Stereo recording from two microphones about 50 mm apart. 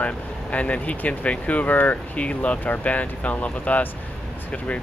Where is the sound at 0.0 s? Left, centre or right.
Left.